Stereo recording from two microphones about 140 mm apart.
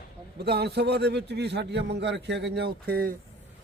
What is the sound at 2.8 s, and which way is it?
Speech, 90° right.